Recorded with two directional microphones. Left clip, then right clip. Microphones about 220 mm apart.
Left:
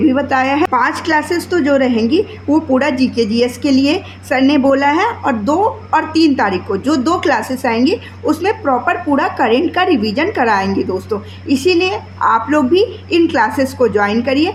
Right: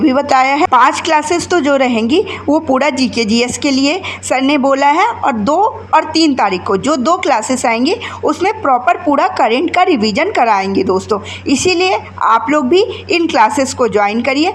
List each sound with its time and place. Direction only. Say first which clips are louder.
0.1 s a woman's voice: right 3 dB; 30° right (ahead or behind)